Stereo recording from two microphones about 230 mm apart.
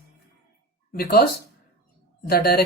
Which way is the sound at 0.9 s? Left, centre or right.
Left.